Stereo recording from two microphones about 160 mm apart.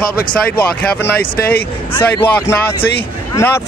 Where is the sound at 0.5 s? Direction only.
10° left (ahead or behind).